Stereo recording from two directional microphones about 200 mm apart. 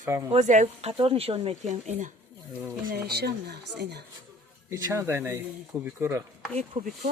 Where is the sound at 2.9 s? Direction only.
50° right (ahead or behind).